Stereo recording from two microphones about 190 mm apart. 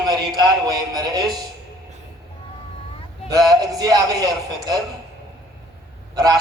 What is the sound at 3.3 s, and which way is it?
A man's voice, 20° right (ahead or behind).